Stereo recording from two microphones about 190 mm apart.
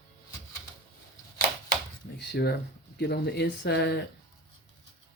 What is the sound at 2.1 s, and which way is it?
Speech, 65° left (ahead or behind).